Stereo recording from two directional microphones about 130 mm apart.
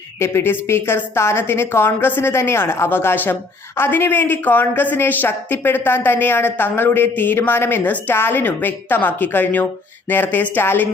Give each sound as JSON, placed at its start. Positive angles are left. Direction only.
{"t": 0.2, "sound": "a woman's voice", "side_deg": 20}